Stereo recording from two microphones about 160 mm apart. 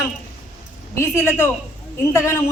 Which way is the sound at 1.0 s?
15° left (ahead or behind).